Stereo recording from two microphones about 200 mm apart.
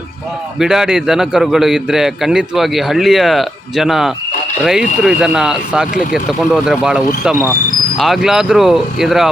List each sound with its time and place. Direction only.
0.6 s a man's voice: centre (ahead or behind)